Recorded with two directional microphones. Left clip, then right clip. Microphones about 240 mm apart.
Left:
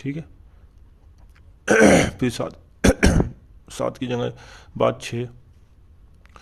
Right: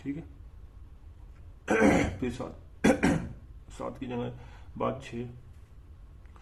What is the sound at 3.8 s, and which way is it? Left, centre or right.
Speech, left.